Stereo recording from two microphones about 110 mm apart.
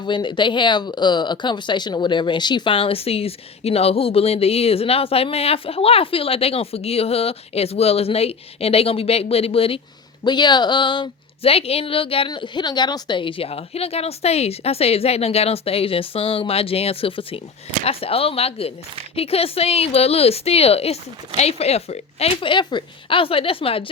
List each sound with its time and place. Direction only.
0.0 s speech: 45° left (ahead or behind)
10.2 s a woman's voice: 40° left (ahead or behind)
12.3 s speech: 40° left (ahead or behind); by 23.8 s 60° left (ahead or behind)